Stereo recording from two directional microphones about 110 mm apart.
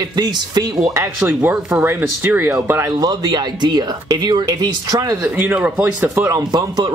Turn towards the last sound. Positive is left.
turn(degrees=-35)  # may be behind; listen again after turning